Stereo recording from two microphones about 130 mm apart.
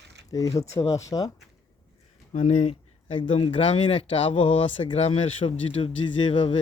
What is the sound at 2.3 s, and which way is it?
Speech, 65° left (ahead or behind).